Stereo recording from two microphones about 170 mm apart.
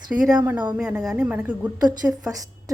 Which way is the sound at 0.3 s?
15° right (ahead or behind).